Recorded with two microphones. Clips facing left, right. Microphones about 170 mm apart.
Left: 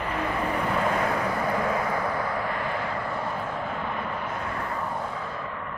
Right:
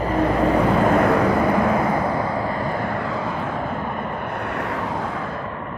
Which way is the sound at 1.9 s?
40° right (ahead or behind).